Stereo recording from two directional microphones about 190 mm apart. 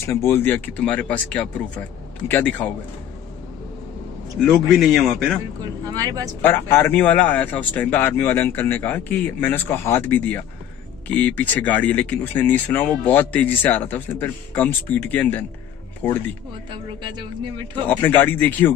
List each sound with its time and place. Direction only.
0.0 s speech: 15° left (ahead or behind)
4.4 s a man's voice: centre (ahead or behind)
5.9 s speech: 20° right (ahead or behind)
6.4 s a man's voice: 10° left (ahead or behind)
18.0 s speech: 10° left (ahead or behind)